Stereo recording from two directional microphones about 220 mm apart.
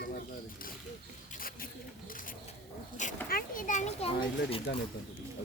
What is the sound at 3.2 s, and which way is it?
Children playing, 40° left (ahead or behind).